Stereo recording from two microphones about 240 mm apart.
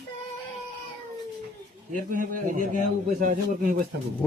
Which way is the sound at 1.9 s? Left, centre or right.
Right.